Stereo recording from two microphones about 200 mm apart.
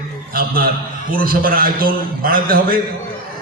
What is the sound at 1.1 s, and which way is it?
A man's voice, 45° right (ahead or behind).